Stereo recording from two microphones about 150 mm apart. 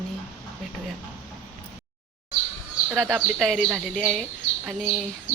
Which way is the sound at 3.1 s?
Centre (ahead or behind).